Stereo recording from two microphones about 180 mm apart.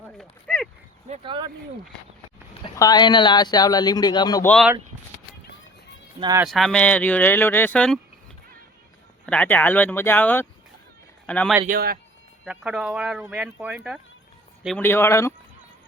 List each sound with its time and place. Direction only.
0.2 s a sound: 5° left (ahead or behind)
1.0 s a sound: 35° right (ahead or behind)
2.7 s speech: 20° left (ahead or behind)
4.4 s speech: 5° left (ahead or behind)
6.1 s speech: 20° right (ahead or behind)
6.5 s speech: 5° left (ahead or behind)
9.2 s speech: 10° left (ahead or behind)
11.6 s speech: 55° right (ahead or behind)
12.5 s speech: 5° right (ahead or behind)
14.8 s speech: 15° left (ahead or behind)